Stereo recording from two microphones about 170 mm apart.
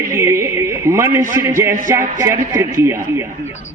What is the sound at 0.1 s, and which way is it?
A man's voice, 15° right (ahead or behind).